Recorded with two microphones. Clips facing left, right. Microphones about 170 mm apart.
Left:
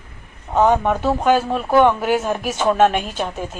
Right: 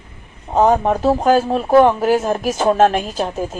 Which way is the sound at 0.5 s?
35° right (ahead or behind).